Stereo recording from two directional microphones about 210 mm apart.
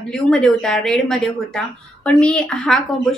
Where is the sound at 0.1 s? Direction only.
5° left (ahead or behind).